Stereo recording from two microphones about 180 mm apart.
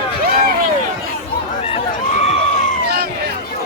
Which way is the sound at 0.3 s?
55° right (ahead or behind).